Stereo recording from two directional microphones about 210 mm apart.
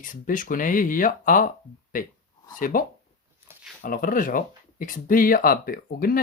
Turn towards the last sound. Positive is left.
turn(degrees=45)  # may be behind; listen again after turning